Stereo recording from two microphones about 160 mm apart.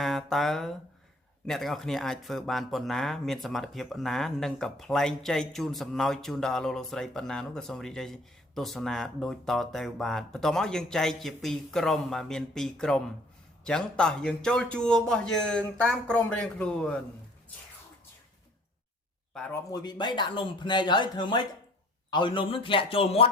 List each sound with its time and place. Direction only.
0.0 s speech: centre (ahead or behind)
19.3 s a man's voice: 5° left (ahead or behind)
19.5 s a man's voice: 25° left (ahead or behind)